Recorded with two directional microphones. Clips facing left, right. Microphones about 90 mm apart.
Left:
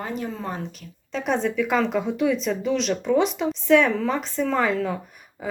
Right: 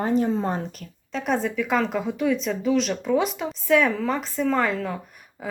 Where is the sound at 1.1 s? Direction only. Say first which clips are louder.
Left 1 dB; centre (ahead or behind).